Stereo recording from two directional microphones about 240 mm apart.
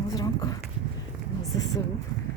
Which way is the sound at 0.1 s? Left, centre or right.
Centre.